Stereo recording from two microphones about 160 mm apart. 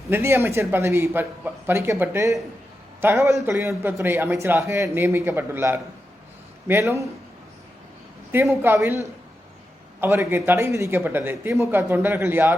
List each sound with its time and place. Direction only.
0.1 s a man's voice: 15° right (ahead or behind)
8.3 s a man's voice: 15° right (ahead or behind)
10.0 s a man's voice: 15° right (ahead or behind)